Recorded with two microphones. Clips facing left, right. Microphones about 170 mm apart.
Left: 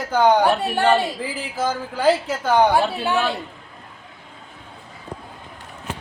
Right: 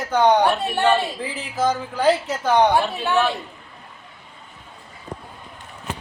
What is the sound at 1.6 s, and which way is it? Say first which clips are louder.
A man's voice: even; 5° left (ahead or behind).